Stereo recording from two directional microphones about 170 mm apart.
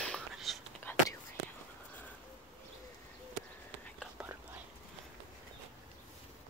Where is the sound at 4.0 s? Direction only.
10° right (ahead or behind).